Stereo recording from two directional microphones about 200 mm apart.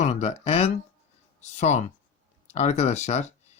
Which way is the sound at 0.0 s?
35° left (ahead or behind).